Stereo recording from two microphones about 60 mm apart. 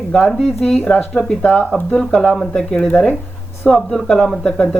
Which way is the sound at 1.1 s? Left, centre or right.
Centre.